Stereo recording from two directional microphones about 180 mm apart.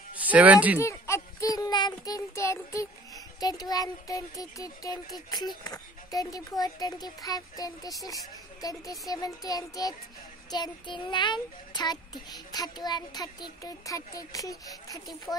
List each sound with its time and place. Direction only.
0.2 s speech: 10° right (ahead or behind)
0.7 s a child's voice: 15° left (ahead or behind)